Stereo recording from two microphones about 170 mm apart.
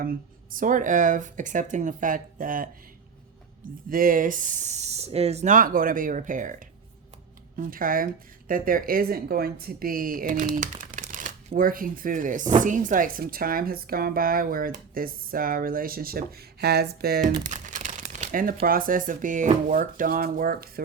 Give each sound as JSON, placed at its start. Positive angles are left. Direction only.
{"t": 0.0, "sound": "speech", "side_deg": -55}
{"t": 3.8, "sound": "speech", "side_deg": -55}